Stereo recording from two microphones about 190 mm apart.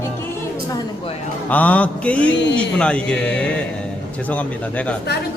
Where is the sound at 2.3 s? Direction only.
70° left (ahead or behind).